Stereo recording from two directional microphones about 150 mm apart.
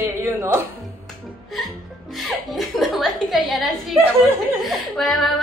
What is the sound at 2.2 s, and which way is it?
A woman's voice, centre (ahead or behind).